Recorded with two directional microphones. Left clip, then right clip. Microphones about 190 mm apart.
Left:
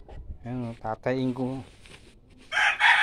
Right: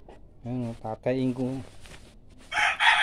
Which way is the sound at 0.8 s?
Centre (ahead or behind).